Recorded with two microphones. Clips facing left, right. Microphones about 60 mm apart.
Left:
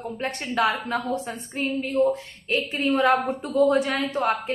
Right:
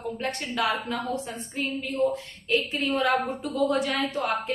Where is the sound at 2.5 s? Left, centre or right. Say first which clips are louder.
Left 2 dB; left.